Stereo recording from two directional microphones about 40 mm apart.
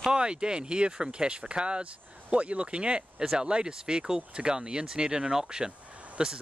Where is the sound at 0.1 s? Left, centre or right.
Right.